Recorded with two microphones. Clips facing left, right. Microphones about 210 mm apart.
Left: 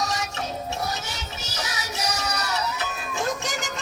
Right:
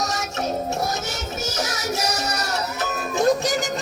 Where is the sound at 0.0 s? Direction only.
45° right (ahead or behind).